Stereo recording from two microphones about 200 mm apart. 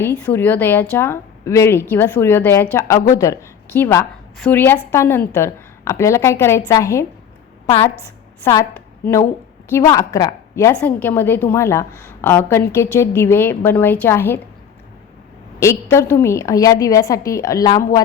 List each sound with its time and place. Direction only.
0.3 s a woman's voice: 10° left (ahead or behind)
8.4 s a woman's voice: 15° left (ahead or behind)
15.6 s a woman's voice: 15° left (ahead or behind)